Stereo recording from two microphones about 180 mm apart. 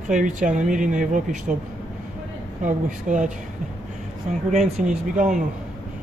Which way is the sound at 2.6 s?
45° right (ahead or behind).